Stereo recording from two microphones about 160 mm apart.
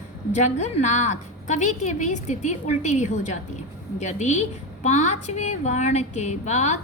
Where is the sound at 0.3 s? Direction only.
45° left (ahead or behind).